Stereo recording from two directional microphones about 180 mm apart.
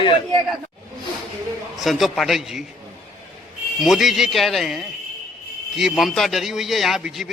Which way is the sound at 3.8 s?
Centre (ahead or behind).